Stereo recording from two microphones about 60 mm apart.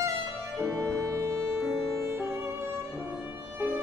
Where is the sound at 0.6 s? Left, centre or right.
Right.